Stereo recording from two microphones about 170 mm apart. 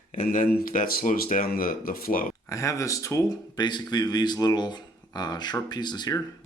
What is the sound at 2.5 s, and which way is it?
Speech, 20° left (ahead or behind).